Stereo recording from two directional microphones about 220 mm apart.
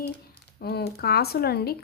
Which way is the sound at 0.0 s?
45° left (ahead or behind).